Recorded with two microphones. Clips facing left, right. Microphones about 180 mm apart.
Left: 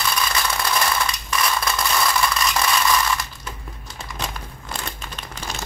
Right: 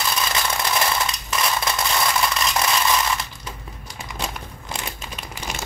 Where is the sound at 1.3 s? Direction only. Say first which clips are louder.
Even; 25° right (ahead or behind).